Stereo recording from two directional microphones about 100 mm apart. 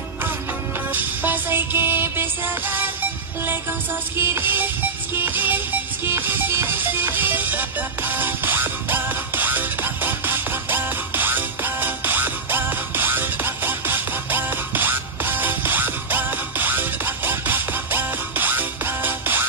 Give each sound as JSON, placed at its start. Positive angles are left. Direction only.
{"t": 0.9, "sound": "music", "side_deg": -20}